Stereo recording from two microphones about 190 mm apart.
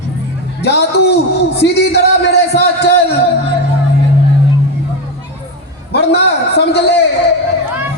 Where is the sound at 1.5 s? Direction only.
60° left (ahead or behind).